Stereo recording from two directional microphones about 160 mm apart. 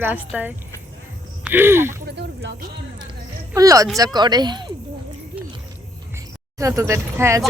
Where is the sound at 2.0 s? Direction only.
90° right.